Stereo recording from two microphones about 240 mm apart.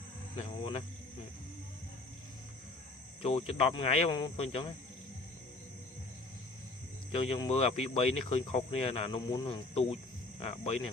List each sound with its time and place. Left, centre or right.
0.3 s speech: left
3.2 s speech: left
7.1 s speech: left